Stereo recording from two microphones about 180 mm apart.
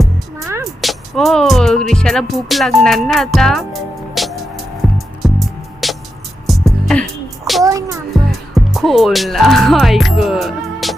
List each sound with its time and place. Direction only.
0.8 s speech: centre (ahead or behind)
4.1 s music: centre (ahead or behind)
7.6 s music: 20° right (ahead or behind)
8.1 s speech: centre (ahead or behind)